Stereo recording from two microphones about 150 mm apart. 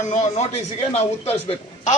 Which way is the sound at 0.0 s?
45° left (ahead or behind).